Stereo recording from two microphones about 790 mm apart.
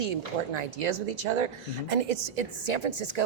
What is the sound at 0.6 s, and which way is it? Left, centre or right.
Speech, right.